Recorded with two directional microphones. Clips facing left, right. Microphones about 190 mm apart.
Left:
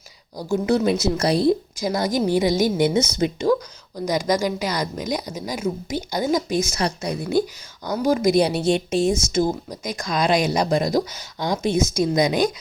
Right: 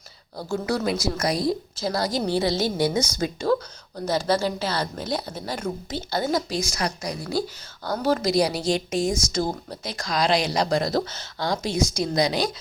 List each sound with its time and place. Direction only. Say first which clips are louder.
0.3 s a woman's voice: left 6 dB; 20° left (ahead or behind)